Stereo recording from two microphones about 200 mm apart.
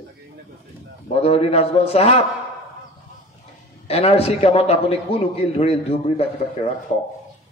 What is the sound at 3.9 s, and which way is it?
A man's voice, 30° left (ahead or behind).